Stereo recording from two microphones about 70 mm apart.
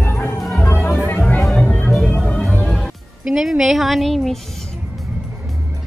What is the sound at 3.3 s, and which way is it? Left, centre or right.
Speech, centre.